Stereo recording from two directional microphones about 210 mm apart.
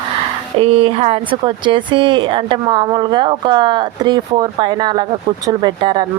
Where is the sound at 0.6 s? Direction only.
30° right (ahead or behind).